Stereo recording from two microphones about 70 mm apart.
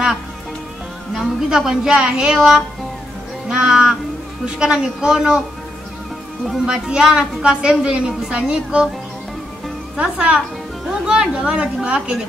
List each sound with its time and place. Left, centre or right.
1.1 s a woman's voice: centre
6.6 s a woman's voice: centre
9.9 s a woman's voice: centre